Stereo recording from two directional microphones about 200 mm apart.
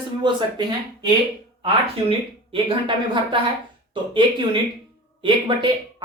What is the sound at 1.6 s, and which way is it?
Speech, 25° right (ahead or behind).